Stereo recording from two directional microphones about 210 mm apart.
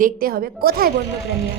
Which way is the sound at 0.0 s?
45° right (ahead or behind).